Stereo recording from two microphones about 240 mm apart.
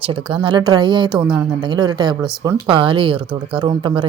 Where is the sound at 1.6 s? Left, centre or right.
Centre.